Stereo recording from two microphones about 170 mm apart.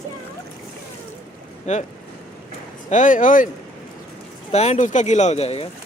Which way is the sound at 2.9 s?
45° left (ahead or behind).